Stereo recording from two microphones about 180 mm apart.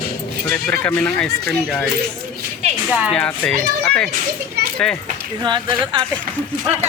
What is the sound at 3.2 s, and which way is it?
Speech, 10° left (ahead or behind).